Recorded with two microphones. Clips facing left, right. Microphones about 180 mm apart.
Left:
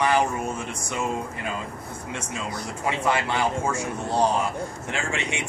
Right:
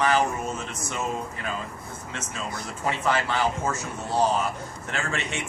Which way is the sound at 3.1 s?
10° left (ahead or behind).